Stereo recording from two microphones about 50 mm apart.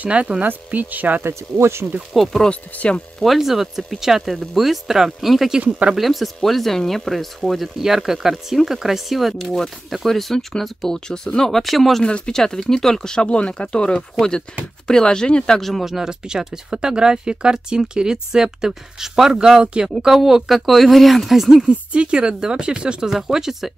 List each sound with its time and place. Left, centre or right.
0.0 s speech: right
1.2 s speech: right
2.1 s speech: centre
2.5 s speech: left
3.2 s speech: centre
5.6 s speech: right
5.9 s speech: centre
12.0 s speech: centre
12.4 s speech: centre
15.8 s speech: centre
21.6 s speech: right